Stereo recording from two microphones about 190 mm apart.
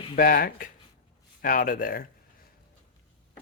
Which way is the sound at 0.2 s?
50° left (ahead or behind).